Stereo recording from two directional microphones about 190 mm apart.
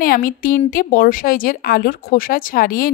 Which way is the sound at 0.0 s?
50° left (ahead or behind).